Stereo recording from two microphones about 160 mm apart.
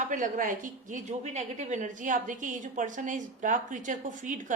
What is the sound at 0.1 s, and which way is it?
A woman's voice, 55° right (ahead or behind).